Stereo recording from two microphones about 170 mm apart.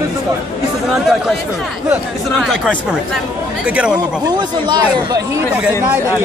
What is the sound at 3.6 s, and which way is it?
Speech, 5° right (ahead or behind).